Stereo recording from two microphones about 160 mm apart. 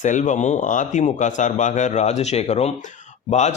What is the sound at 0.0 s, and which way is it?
A man's voice, 50° left (ahead or behind).